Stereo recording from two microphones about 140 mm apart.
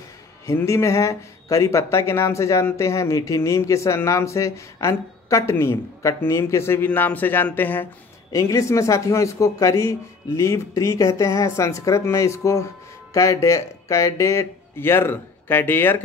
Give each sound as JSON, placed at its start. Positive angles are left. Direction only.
{"t": 0.5, "sound": "speech", "side_deg": 20}